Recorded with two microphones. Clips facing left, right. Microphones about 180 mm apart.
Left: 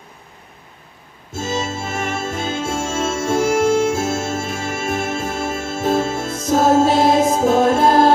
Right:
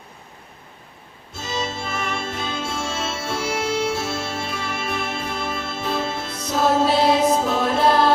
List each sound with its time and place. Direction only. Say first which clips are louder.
1.3 s music: left 5 dB; 45° left (ahead or behind)